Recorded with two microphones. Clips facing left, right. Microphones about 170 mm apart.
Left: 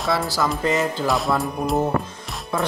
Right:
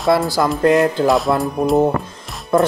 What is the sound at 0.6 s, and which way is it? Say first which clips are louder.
Speech: right 8 dB; 60° right (ahead or behind).